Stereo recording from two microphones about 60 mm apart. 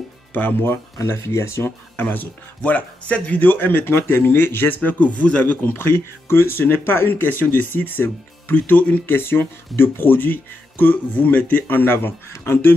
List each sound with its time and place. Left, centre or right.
0.3 s speech: left
1.0 s speech: left
2.0 s speech: left
4.8 s speech: left
9.1 s speech: left